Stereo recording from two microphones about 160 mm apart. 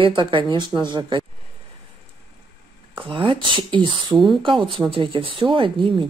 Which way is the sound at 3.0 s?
35° right (ahead or behind).